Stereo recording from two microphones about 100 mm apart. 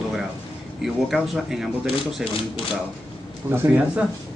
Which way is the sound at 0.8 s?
5° right (ahead or behind).